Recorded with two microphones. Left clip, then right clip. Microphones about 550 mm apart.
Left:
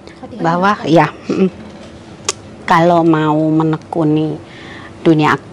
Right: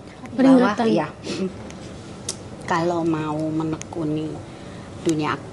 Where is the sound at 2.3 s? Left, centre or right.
Left.